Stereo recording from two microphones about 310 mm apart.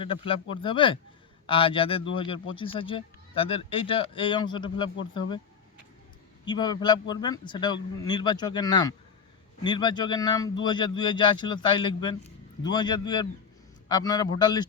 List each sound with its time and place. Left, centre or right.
0.0 s speech: centre
6.4 s speech: centre